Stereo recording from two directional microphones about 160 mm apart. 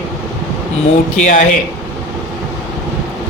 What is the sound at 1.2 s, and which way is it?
Speech, 55° left (ahead or behind).